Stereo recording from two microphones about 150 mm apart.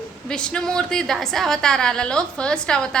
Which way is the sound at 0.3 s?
5° left (ahead or behind).